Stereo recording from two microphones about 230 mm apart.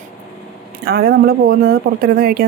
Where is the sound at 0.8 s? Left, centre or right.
Right.